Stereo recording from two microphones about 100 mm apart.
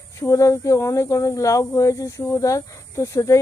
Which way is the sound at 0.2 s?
30° left (ahead or behind).